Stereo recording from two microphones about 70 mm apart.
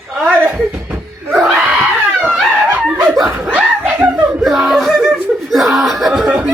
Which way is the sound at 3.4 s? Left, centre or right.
Centre.